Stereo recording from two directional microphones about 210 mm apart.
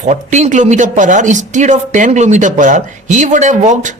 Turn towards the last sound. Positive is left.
turn(degrees=-35)  # may be behind; listen again after turning